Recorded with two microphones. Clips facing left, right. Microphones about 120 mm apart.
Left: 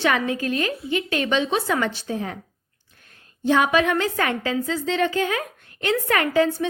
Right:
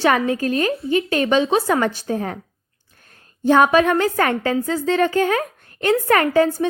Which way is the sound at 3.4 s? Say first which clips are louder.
Right 5 dB; 45° right (ahead or behind).